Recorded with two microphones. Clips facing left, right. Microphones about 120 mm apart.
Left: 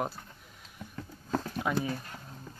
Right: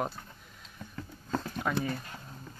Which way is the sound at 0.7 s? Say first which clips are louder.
Even; 10° left (ahead or behind).